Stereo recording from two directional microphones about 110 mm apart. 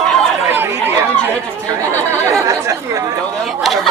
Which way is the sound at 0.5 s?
20° right (ahead or behind).